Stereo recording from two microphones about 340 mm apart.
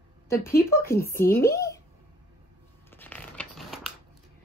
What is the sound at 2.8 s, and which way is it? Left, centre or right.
Scissors, centre.